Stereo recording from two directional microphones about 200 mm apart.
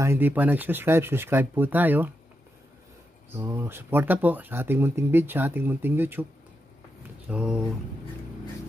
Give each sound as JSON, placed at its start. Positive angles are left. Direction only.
{"t": 0.0, "sound": "speech", "side_deg": -10}
{"t": 3.3, "sound": "speech", "side_deg": -10}
{"t": 7.2, "sound": "speech", "side_deg": -5}